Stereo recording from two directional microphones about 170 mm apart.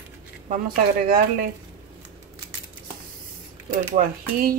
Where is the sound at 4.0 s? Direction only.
55° right (ahead or behind).